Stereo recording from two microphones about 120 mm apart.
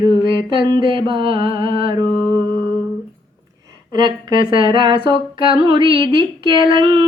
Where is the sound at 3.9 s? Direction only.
40° right (ahead or behind).